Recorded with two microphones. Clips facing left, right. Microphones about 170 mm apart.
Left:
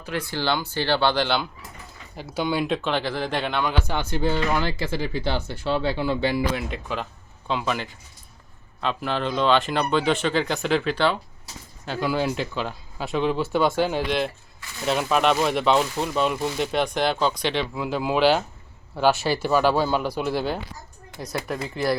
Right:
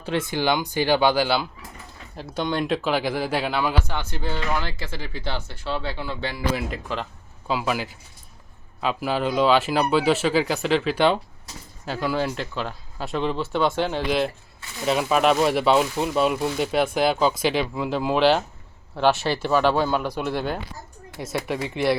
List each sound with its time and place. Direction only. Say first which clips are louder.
0.0 s speech: right 3 dB; 25° right (ahead or behind); by 1.5 s 5° right (ahead or behind)
2.1 s speech: left 1 dB; 5° left (ahead or behind)
3.8 s speech: left 5 dB; 5° left (ahead or behind)
10.9 s speech: right 3 dB; 20° right (ahead or behind)
11.9 s speech: left 1 dB; centre (ahead or behind)